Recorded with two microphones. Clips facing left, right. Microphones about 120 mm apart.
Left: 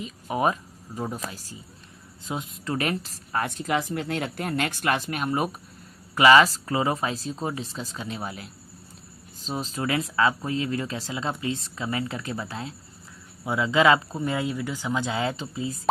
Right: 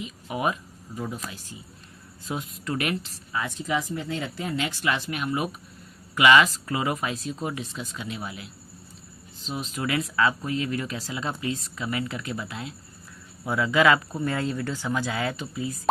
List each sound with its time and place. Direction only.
0.0 s speech: 35° left (ahead or behind)
2.2 s speech: 25° left (ahead or behind); by 3.4 s 40° left (ahead or behind)
3.4 s speech: 60° left (ahead or behind); by 8.4 s 40° left (ahead or behind)
9.5 s speech: 35° left (ahead or behind)
13.4 s speech: 20° left (ahead or behind)